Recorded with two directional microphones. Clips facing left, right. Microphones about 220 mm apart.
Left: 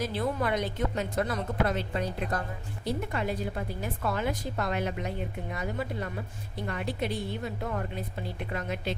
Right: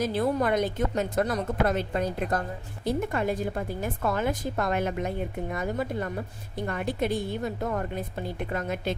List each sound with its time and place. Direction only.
0.0 s a woman's voice: 45° right (ahead or behind)